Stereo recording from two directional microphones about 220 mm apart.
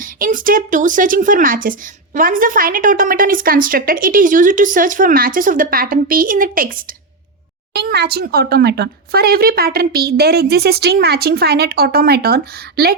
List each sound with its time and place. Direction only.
0.0 s a woman's voice: 40° right (ahead or behind)